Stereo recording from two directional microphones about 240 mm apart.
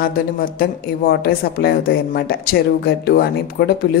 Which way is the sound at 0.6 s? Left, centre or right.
Left.